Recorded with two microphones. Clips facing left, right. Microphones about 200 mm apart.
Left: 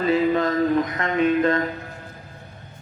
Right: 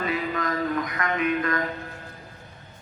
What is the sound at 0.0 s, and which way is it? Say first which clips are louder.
Music: left 8 dB; 30° left (ahead or behind).